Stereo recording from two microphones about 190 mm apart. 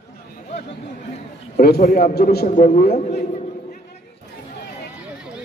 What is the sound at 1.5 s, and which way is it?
A man's voice, 50° left (ahead or behind).